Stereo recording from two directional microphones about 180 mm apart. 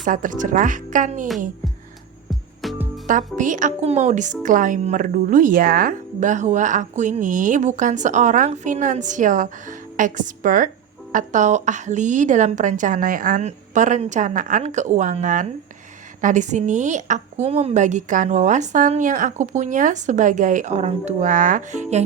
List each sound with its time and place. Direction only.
0.0 s speech: 45° right (ahead or behind)
2.3 s music: centre (ahead or behind)
3.3 s speech: 45° right (ahead or behind)